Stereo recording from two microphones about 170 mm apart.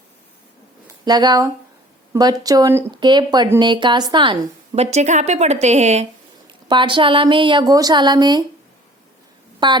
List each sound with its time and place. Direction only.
1.0 s a woman's voice: 25° right (ahead or behind); by 6.1 s 40° right (ahead or behind)
6.7 s speech: 30° right (ahead or behind)
9.6 s speech: 25° right (ahead or behind)